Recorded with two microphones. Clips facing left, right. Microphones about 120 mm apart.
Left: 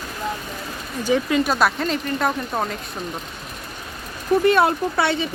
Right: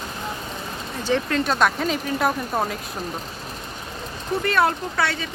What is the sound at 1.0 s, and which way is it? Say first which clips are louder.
Speech: left 3 dB; 10° left (ahead or behind).